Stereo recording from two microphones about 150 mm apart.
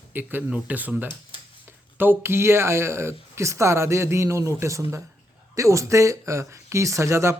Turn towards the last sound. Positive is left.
turn(degrees=-20)  # may be behind; listen again after turning